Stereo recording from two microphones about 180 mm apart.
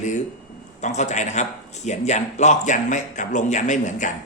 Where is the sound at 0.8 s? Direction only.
40° left (ahead or behind).